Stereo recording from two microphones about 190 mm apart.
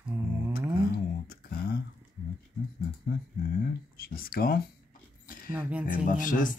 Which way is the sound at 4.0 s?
50° left (ahead or behind).